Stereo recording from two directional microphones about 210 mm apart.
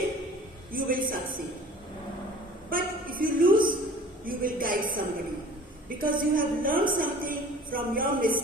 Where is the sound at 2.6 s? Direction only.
40° right (ahead or behind).